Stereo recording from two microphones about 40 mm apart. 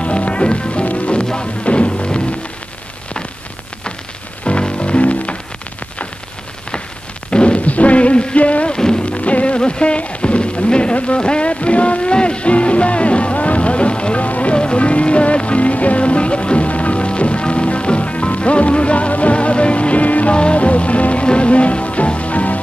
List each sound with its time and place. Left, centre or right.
0.0 s music: left
0.8 s rain: left
1.6 s music: left
4.5 s music: left
7.2 s music: left
8.4 s rain: left
8.7 s rain: centre
9.0 s music: left
9.6 s rain: left